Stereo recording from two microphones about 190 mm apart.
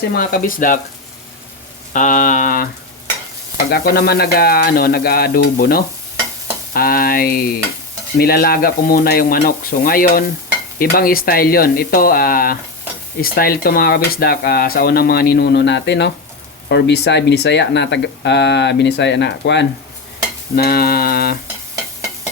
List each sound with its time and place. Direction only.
0.1 s speech: 50° left (ahead or behind)
1.9 s rain on surface: 40° left (ahead or behind)
3.7 s speech: 55° left (ahead or behind)
20.6 s speech: 55° left (ahead or behind)